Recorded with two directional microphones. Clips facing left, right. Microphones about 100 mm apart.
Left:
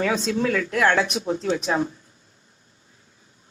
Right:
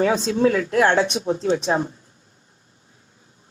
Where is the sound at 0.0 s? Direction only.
30° right (ahead or behind).